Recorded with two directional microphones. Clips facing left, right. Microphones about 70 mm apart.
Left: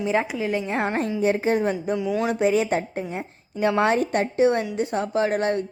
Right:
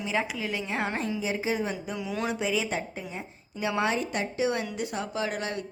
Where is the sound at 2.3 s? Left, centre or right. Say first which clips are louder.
Left 9 dB; left.